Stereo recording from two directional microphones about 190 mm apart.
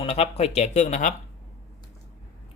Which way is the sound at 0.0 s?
30° left (ahead or behind).